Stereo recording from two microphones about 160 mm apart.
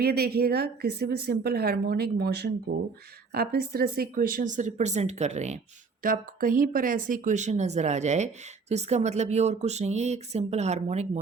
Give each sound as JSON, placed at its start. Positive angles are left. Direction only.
{"t": 0.0, "sound": "speech", "side_deg": -80}
{"t": 3.3, "sound": "speech", "side_deg": -75}
{"t": 6.0, "sound": "speech", "side_deg": -60}